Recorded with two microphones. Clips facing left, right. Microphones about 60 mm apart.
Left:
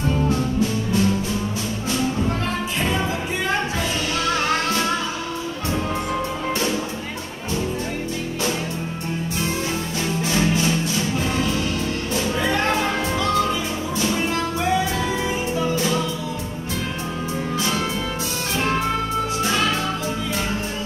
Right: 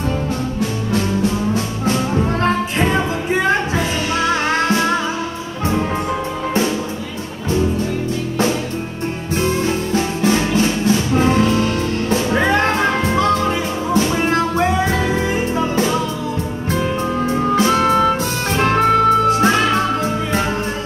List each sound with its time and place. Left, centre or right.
2.4 s music: right
9.9 s music: right
17.3 s music: right